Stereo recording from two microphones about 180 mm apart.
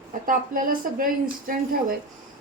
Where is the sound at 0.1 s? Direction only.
50° right (ahead or behind).